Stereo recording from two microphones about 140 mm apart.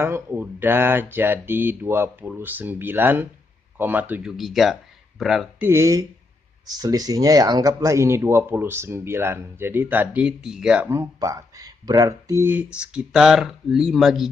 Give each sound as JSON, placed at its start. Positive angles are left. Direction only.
{"t": 0.0, "sound": "speech", "side_deg": -15}
{"t": 4.4, "sound": "speech", "side_deg": 0}
{"t": 5.6, "sound": "speech", "side_deg": -20}
{"t": 10.9, "sound": "speech", "side_deg": -25}
{"t": 12.4, "sound": "speech", "side_deg": -10}